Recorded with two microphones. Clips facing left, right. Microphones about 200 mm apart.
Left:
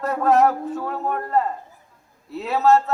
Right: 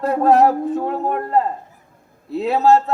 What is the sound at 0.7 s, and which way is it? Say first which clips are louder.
Speech: right 5 dB; 25° right (ahead or behind).